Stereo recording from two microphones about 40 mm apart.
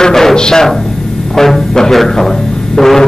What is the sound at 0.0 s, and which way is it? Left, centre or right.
Music, centre.